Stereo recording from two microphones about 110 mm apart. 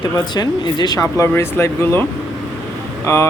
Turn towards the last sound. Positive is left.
turn(degrees=25)  # may be behind; listen again after turning